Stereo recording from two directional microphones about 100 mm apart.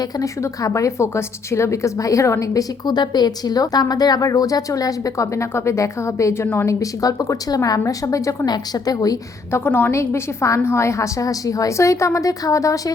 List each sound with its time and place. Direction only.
0.2 s a woman's voice: 35° left (ahead or behind)
9.5 s a woman's voice: 20° left (ahead or behind)